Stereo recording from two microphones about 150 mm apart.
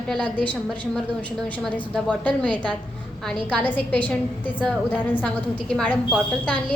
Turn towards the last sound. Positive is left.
turn(degrees=10)  # may be behind; listen again after turning